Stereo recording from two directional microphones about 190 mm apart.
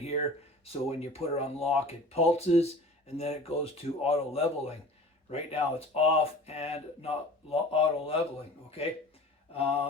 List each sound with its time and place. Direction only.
0.0 s speech: 35° left (ahead or behind)